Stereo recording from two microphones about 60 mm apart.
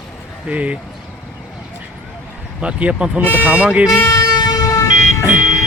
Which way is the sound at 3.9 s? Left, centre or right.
Left.